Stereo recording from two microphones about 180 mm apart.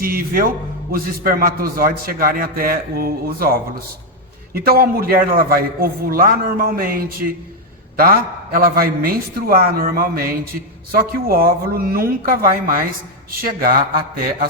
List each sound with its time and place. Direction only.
0.0 s a man's voice: 55° right (ahead or behind)